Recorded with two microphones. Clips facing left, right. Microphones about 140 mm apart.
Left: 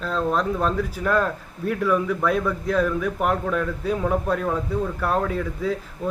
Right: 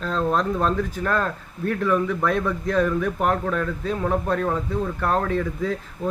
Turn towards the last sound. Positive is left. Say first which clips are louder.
# right 1 dB
turn(degrees=5)  # may be behind; listen again after turning